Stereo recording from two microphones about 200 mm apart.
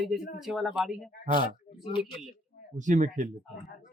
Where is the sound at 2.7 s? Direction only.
35° right (ahead or behind).